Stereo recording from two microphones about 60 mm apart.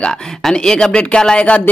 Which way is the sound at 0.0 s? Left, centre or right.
Centre.